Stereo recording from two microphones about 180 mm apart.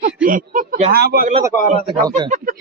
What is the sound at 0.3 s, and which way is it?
A man's voice, 45° right (ahead or behind).